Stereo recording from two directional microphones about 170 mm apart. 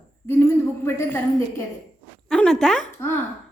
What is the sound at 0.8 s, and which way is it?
Speech, 15° left (ahead or behind).